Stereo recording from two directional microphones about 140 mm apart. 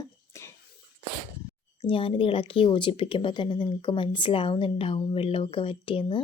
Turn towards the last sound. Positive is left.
turn(degrees=40)  # may be behind; listen again after turning